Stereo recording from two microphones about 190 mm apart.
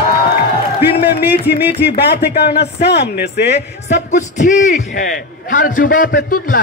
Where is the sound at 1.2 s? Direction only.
55° left (ahead or behind).